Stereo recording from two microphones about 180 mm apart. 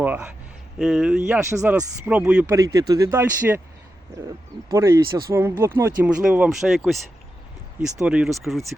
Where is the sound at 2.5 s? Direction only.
20° right (ahead or behind).